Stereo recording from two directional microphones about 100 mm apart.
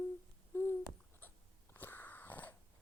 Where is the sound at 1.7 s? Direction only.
20° left (ahead or behind).